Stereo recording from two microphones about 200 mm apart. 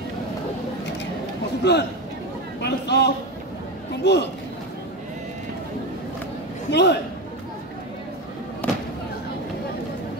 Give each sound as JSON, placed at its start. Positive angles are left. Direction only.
{"t": 1.6, "sound": "a man's voice", "side_deg": 55}
{"t": 6.7, "sound": "a man's voice", "side_deg": 60}